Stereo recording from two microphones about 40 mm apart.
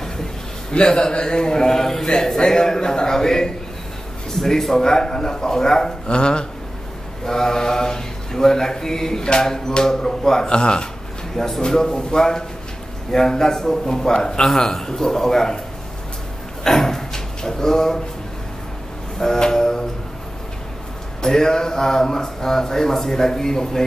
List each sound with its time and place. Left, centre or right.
0.0 s a sound: centre
0.7 s mantra: left
6.0 s speech: left
7.2 s mantra: centre
11.3 s mantra: centre
16.6 s speech: centre
19.1 s mantra: centre
21.2 s mantra: centre